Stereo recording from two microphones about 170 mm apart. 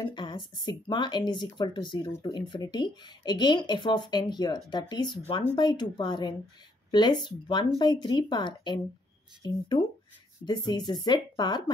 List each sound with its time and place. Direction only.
0.0 s speech: 25° left (ahead or behind)